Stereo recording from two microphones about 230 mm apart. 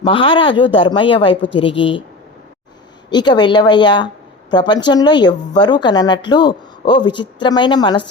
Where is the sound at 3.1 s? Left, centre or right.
Centre.